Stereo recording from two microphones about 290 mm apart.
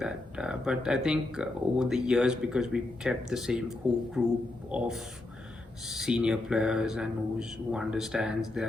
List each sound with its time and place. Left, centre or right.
0.0 s speech: centre